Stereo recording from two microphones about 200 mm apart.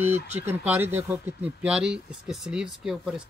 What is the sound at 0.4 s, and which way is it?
Speech, 10° right (ahead or behind).